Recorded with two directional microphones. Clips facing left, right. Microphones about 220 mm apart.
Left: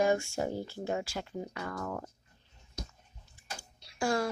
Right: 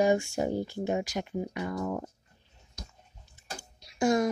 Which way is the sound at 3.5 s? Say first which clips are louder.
Right 6 dB; 20° right (ahead or behind).